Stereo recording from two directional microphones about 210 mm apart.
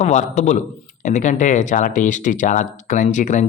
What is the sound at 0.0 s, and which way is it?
Speech, 35° left (ahead or behind).